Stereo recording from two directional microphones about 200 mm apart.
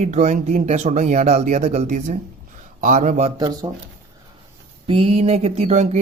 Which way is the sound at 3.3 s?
20° right (ahead or behind).